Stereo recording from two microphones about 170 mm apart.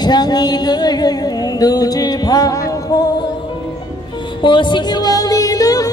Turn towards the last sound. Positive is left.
turn(degrees=20)  # may be behind; listen again after turning